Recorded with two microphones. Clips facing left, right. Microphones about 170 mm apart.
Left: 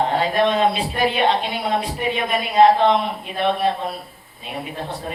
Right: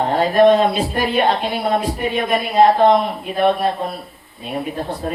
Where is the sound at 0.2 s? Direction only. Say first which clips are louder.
Right 9 dB; 45° right (ahead or behind).